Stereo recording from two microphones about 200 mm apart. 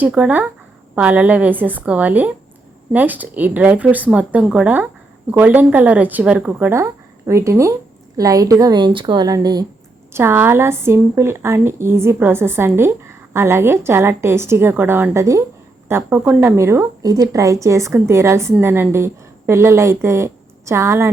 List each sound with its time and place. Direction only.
0.0 s speech: 5° right (ahead or behind)